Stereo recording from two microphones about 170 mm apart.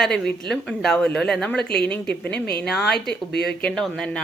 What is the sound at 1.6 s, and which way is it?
Speech, 70° left (ahead or behind).